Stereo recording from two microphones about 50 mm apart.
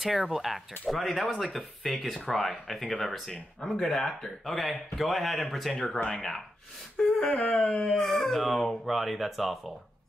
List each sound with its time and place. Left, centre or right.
0.0 s speech: centre
7.0 s a sound: centre
7.8 s speech: centre